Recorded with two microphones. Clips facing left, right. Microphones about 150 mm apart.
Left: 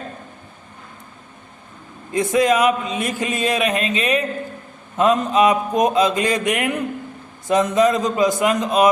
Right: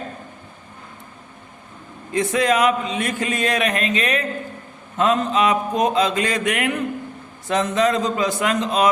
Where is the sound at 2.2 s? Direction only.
10° left (ahead or behind).